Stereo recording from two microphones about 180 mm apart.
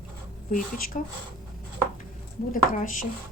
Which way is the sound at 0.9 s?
45° left (ahead or behind).